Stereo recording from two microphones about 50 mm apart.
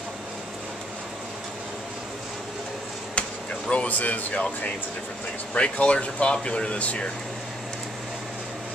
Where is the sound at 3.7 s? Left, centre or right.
Left.